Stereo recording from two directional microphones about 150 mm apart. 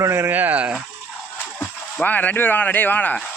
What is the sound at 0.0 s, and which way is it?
Speech, 15° right (ahead or behind).